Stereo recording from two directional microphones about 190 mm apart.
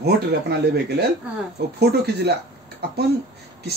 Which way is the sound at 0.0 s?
60° right (ahead or behind).